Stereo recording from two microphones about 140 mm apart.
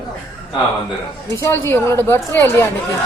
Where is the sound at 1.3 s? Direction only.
20° left (ahead or behind).